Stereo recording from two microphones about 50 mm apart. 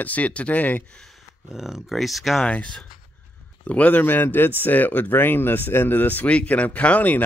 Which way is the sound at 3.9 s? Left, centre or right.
Left.